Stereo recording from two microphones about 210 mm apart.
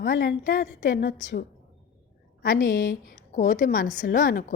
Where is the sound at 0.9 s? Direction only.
50° left (ahead or behind).